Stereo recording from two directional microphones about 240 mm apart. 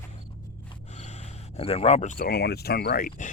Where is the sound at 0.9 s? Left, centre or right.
Left.